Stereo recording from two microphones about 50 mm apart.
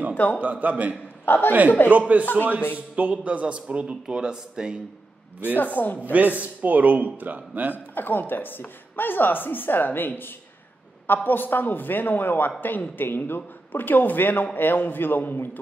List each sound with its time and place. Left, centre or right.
0.1 s a woman's voice: left
0.4 s a man's voice: right
1.2 s a man's voice: left
1.9 s a man's voice: right
2.2 s a woman's voice: left
3.0 s a man's voice: right
5.6 s a woman's voice: left
6.1 s a man's voice: right
7.7 s a woman's voice: left